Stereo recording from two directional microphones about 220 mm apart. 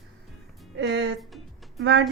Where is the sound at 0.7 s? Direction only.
55° right (ahead or behind).